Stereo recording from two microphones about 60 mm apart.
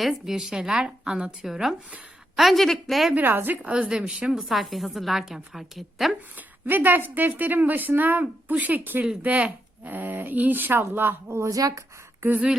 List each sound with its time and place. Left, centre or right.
0.0 s a woman's voice: centre
3.2 s a woman's voice: right; by 6.1 s centre
6.3 s speech: right
11.3 s speech: right
11.5 s speech: right